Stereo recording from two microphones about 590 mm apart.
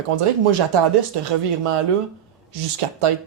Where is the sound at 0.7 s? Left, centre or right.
Right.